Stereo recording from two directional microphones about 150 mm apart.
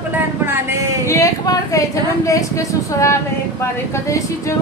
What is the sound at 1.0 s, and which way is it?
A woman's voice, 20° left (ahead or behind).